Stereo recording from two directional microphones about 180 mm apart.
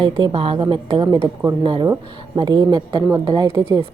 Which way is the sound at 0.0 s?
30° right (ahead or behind).